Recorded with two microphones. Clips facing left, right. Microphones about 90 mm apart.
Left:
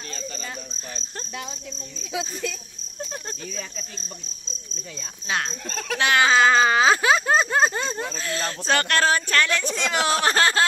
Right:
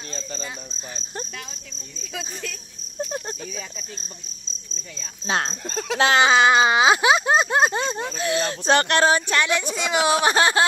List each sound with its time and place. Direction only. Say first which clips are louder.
0.1 s speech: right 2 dB; 30° right (ahead or behind)
5.2 s speech: right 3 dB; 30° right (ahead or behind)